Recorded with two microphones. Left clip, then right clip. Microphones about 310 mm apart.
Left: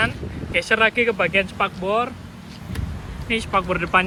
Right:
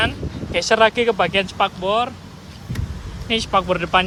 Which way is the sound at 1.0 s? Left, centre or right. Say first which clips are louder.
Right 2 dB; centre.